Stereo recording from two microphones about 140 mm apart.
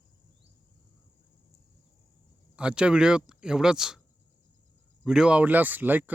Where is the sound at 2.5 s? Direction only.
5° right (ahead or behind).